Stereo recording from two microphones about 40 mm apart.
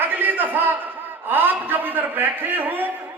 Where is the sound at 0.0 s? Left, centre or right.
Right.